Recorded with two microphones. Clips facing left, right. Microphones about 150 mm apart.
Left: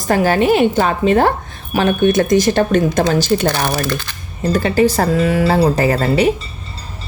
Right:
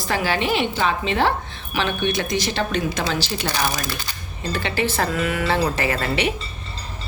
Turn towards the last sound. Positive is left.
turn(degrees=40)  # may be behind; listen again after turning